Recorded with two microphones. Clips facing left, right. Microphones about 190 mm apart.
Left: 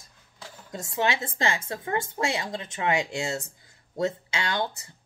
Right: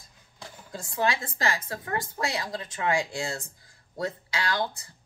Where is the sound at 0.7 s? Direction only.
25° left (ahead or behind).